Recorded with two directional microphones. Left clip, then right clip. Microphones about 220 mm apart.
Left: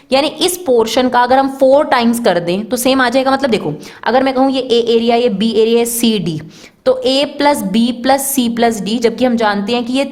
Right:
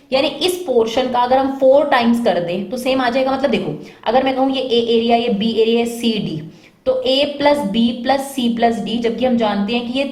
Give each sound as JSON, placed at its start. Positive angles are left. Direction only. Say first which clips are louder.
{"t": 0.1, "sound": "a woman's voice", "louder": "left 3 dB", "side_deg": 50}